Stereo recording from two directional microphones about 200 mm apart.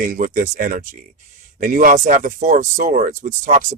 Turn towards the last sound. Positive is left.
turn(degrees=-40)  # may be behind; listen again after turning